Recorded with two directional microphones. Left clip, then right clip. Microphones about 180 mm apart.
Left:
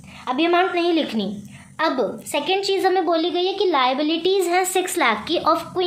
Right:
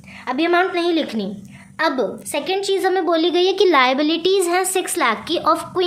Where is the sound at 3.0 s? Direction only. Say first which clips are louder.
Right 4 dB; 30° right (ahead or behind); by 5.6 s 10° right (ahead or behind).